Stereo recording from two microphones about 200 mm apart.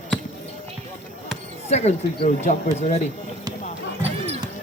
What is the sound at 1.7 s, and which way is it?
Speech, 35° left (ahead or behind).